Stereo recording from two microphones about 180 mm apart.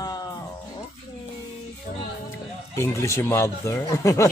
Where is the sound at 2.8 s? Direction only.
15° left (ahead or behind).